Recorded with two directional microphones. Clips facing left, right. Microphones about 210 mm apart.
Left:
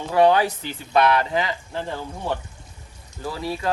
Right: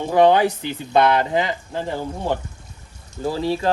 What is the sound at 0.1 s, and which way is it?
Speech, 20° right (ahead or behind).